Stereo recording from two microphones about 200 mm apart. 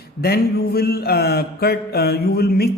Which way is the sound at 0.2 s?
50° left (ahead or behind).